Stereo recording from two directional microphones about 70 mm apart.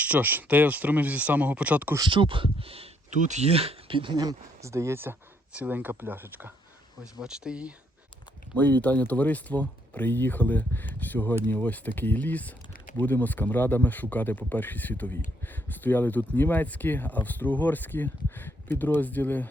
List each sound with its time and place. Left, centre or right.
0.0 s speech: right
2.2 s speech: right
4.1 s speech: right
4.6 s speech: right
5.5 s speech: right
7.0 s speech: centre
8.5 s speech: left